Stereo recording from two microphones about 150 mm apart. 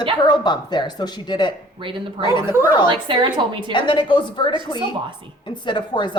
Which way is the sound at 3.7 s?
30° left (ahead or behind).